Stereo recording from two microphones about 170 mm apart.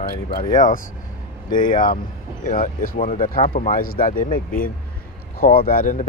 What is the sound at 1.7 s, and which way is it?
Speech, 55° left (ahead or behind).